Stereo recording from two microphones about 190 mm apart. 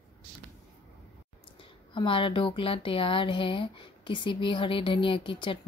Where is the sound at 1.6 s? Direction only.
25° left (ahead or behind).